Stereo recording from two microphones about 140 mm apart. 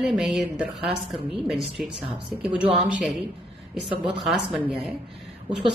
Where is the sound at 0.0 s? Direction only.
5° right (ahead or behind).